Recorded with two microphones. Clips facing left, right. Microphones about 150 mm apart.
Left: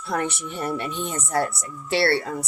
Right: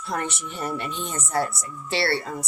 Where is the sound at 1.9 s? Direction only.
60° left (ahead or behind).